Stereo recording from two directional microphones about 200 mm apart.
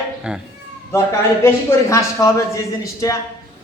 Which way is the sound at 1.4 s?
15° left (ahead or behind).